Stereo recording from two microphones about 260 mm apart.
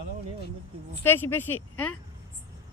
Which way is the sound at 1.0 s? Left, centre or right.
Centre.